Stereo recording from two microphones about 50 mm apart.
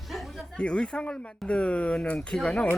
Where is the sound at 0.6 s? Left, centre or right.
Left.